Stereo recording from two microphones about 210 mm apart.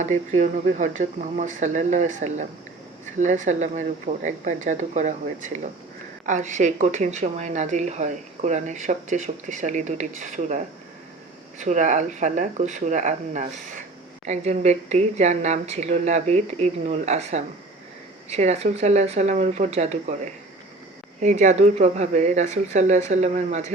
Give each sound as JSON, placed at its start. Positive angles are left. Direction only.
{"t": 0.0, "sound": "speech", "side_deg": -35}
{"t": 6.2, "sound": "speech", "side_deg": -35}
{"t": 11.6, "sound": "speech", "side_deg": -35}